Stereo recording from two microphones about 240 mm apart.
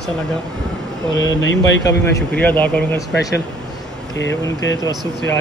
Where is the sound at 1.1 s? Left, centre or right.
Left.